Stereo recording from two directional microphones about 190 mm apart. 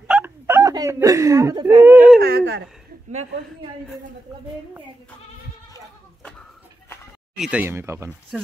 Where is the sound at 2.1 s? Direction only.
55° right (ahead or behind).